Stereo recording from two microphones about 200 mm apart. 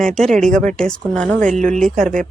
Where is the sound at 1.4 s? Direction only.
40° right (ahead or behind).